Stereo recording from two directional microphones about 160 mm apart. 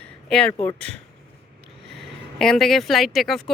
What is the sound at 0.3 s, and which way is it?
Speech, 5° left (ahead or behind).